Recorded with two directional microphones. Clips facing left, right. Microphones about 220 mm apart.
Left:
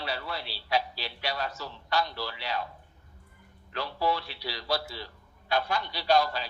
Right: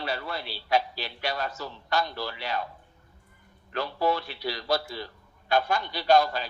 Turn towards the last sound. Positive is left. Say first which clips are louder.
# right 3 dB
turn(degrees=-50)  # may be behind; listen again after turning